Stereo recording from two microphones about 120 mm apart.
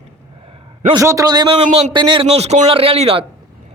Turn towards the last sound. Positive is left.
turn(degrees=-55)  # may be behind; listen again after turning